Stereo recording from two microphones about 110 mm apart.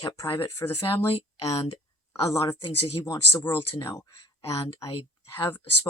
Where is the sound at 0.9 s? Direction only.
55° left (ahead or behind).